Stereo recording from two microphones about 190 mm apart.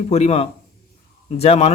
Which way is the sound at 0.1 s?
35° left (ahead or behind).